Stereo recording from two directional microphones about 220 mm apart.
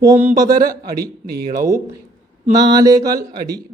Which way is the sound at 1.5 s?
15° right (ahead or behind).